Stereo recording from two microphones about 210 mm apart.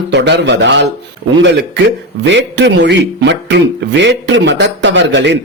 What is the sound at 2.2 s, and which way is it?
Speech, 55° right (ahead or behind).